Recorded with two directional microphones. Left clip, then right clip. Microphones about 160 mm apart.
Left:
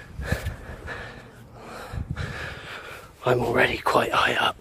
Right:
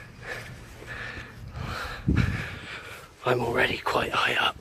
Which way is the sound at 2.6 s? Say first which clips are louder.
Left 2 dB; 50° left (ahead or behind).